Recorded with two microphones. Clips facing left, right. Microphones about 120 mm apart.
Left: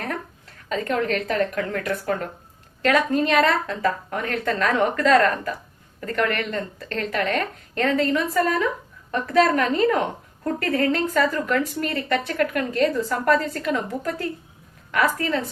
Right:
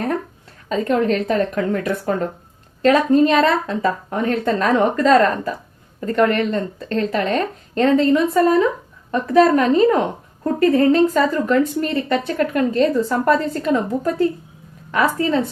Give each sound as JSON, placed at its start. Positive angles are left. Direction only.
{"t": 0.7, "sound": "speech", "side_deg": -30}